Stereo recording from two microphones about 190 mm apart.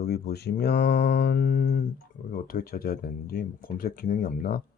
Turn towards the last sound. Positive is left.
turn(degrees=50)  # may be behind; listen again after turning